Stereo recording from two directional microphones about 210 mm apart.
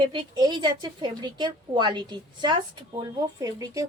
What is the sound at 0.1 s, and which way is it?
A woman's voice, 20° right (ahead or behind).